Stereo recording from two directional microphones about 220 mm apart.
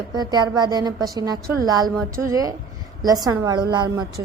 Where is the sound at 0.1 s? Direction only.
20° right (ahead or behind).